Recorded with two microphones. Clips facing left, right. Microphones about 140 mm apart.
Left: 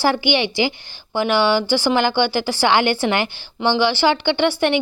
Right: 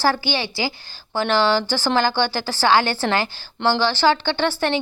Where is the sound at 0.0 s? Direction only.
15° left (ahead or behind).